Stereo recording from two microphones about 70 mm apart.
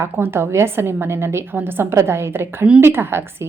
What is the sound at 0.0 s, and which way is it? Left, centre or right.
A woman's voice, right.